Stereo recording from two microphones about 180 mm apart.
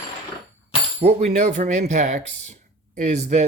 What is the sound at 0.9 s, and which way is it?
Speech, 35° right (ahead or behind).